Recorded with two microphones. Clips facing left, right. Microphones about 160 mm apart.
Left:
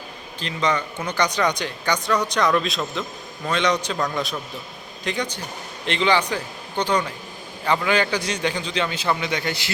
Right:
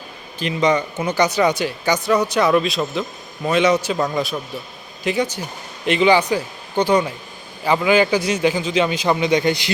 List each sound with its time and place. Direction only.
0.3 s a man's voice: 10° right (ahead or behind)